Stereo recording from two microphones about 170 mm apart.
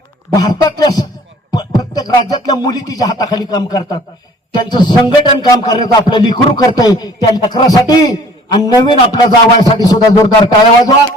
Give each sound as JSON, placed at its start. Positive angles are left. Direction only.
{"t": 0.3, "sound": "a man's voice", "side_deg": 20}